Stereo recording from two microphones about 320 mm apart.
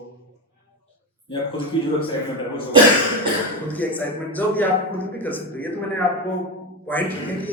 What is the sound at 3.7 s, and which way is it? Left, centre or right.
A man's voice, centre.